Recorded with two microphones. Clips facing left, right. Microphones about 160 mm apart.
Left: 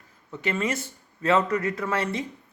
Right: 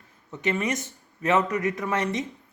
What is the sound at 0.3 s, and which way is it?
Speech, 20° right (ahead or behind).